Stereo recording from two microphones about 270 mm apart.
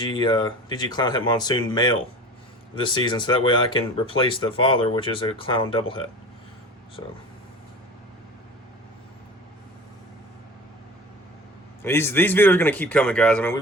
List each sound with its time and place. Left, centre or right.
0.0 s speech: centre
11.8 s speech: centre